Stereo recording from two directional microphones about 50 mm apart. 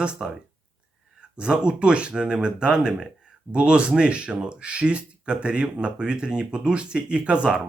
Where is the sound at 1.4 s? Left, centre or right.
Centre.